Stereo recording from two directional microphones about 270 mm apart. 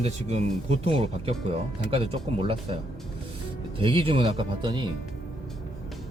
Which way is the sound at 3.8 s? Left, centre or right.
Centre.